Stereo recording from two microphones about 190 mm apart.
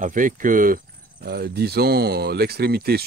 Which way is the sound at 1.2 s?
60° right (ahead or behind).